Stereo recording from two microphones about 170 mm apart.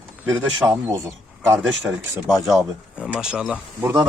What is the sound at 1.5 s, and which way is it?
Speech, 10° right (ahead or behind).